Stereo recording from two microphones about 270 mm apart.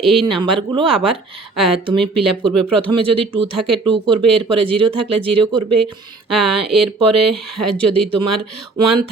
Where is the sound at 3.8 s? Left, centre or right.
Centre.